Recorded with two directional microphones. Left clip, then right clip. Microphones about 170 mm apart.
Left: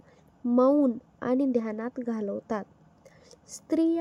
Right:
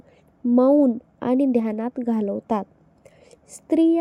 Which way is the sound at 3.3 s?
35° right (ahead or behind).